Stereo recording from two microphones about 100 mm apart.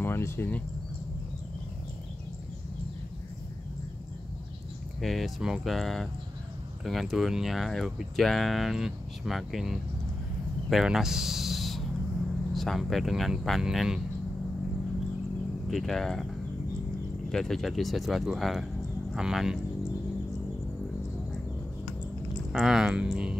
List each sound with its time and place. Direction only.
0.0 s speech: 25° left (ahead or behind)
5.0 s speech: centre (ahead or behind)
15.7 s speech: 5° left (ahead or behind)
17.3 s speech: 5° left (ahead or behind)
19.1 s cricket: 5° right (ahead or behind)
22.5 s speech: 5° right (ahead or behind)